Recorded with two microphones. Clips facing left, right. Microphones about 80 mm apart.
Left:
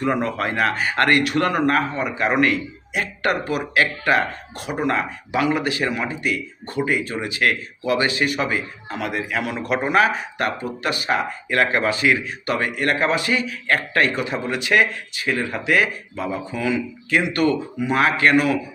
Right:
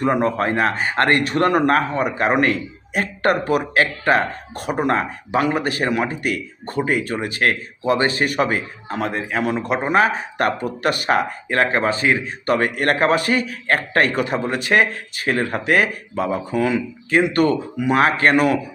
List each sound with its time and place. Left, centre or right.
0.0 s speech: right
9.6 s a man's voice: right
10.3 s speech: right
11.4 s speech: right